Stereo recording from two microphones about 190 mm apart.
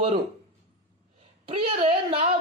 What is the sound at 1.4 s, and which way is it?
Speech, 30° right (ahead or behind).